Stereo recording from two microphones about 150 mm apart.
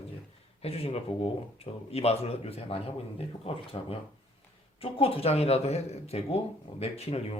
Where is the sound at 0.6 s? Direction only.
40° left (ahead or behind).